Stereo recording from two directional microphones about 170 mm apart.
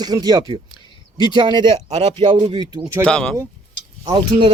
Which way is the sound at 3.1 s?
5° left (ahead or behind).